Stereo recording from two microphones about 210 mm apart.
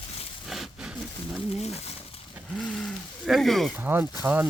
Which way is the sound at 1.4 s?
30° left (ahead or behind).